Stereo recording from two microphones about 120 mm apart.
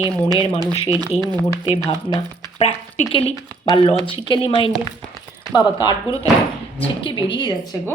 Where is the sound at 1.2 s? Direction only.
35° right (ahead or behind).